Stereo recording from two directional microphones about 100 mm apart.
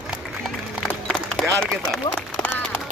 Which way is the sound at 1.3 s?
5° left (ahead or behind).